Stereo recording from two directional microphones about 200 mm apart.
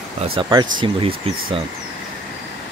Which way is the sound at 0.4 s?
20° right (ahead or behind).